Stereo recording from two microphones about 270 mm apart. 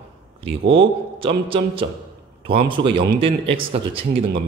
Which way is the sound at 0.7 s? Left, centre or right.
Centre.